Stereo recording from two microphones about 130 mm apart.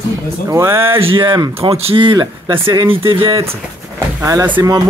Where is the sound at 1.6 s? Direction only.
50° right (ahead or behind).